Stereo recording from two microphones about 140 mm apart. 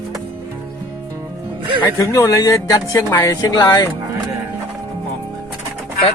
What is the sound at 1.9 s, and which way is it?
Speech, 25° left (ahead or behind).